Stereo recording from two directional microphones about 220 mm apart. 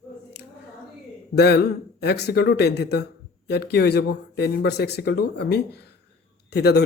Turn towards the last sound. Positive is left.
turn(degrees=50)  # may be behind; listen again after turning